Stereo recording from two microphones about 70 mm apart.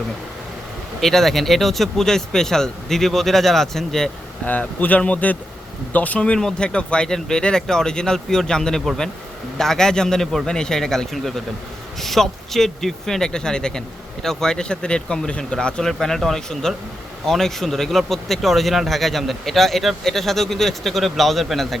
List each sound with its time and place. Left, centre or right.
1.0 s speech: centre
4.4 s speech: left; by 21.8 s centre